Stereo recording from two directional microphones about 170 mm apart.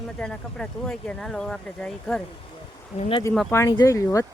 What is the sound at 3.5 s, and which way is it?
Speech, 15° left (ahead or behind).